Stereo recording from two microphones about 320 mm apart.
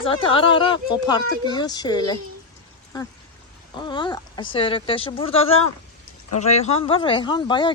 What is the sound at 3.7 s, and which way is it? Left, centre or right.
Speech, centre.